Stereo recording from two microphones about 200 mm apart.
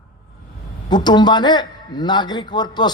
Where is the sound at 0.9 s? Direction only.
20° left (ahead or behind).